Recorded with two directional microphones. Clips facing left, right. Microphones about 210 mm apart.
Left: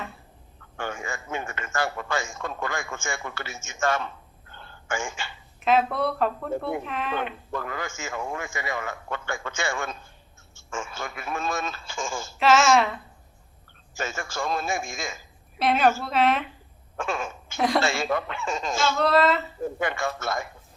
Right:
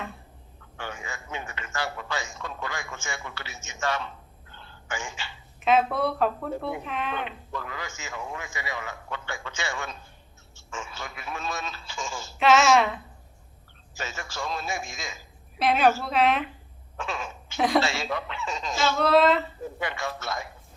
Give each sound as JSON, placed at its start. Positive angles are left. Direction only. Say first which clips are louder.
{"t": 0.8, "sound": "a man's voice", "louder": "left 5 dB", "side_deg": 50}
{"t": 5.5, "sound": "speech", "louder": "even", "side_deg": 0}
{"t": 7.2, "sound": "a man's voice", "louder": "left 4 dB", "side_deg": 50}
{"t": 12.4, "sound": "speech", "louder": "even", "side_deg": 0}
{"t": 13.9, "sound": "a man's voice", "louder": "left 5 dB", "side_deg": 50}
{"t": 15.5, "sound": "speech", "louder": "even", "side_deg": 0}
{"t": 17.0, "sound": "a man's voice", "louder": "left 4 dB", "side_deg": 50}
{"t": 18.9, "sound": "speech", "louder": "right 2 dB", "side_deg": 0}
{"t": 19.6, "sound": "a man's voice", "louder": "left 4 dB", "side_deg": 50}